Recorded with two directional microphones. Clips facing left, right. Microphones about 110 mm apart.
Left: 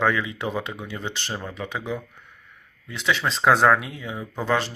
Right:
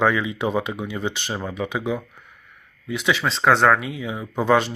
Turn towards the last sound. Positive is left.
turn(degrees=-15)  # may be behind; listen again after turning